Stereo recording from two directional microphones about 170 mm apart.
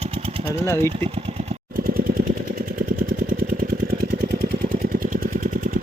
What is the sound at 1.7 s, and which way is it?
Vehicle, 60° right (ahead or behind).